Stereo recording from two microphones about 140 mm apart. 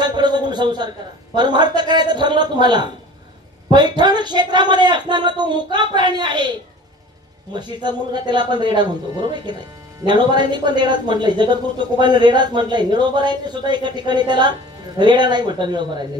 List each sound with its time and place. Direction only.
0.0 s a man's voice: 30° right (ahead or behind)
7.5 s speech: 30° right (ahead or behind)